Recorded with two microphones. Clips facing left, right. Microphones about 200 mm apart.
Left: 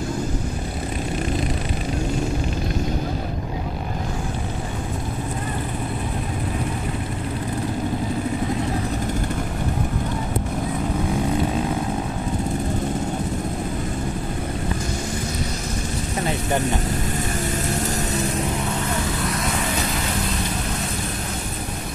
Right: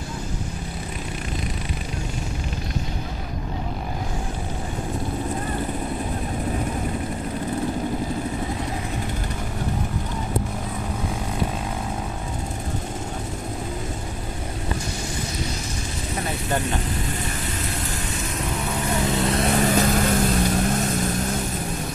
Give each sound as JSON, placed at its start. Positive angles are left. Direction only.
{"t": 19.2, "sound": "vehicle", "side_deg": -30}
{"t": 19.7, "sound": "vehicle", "side_deg": -50}